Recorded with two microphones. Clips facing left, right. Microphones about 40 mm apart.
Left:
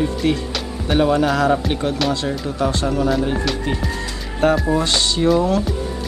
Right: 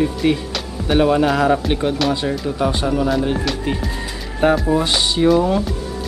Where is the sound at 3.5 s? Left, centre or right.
Centre.